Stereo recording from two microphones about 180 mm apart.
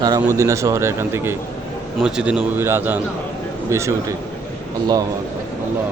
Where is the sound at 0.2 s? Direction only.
15° right (ahead or behind).